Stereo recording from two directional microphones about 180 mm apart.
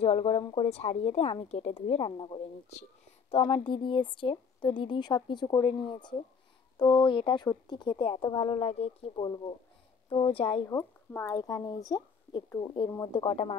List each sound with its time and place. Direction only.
0.0 s a woman's voice: 30° left (ahead or behind)
10.7 s speech: 15° left (ahead or behind)